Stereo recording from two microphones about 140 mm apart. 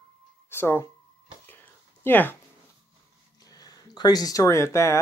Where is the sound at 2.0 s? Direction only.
15° left (ahead or behind).